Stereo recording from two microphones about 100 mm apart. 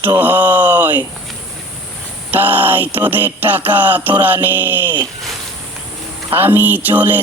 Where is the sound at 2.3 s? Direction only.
20° right (ahead or behind).